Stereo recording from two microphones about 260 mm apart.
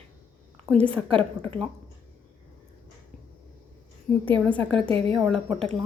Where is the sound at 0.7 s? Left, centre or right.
Centre.